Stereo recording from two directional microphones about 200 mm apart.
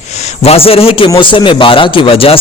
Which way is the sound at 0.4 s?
30° left (ahead or behind).